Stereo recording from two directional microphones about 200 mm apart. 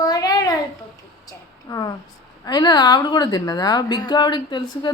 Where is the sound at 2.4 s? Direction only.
20° left (ahead or behind).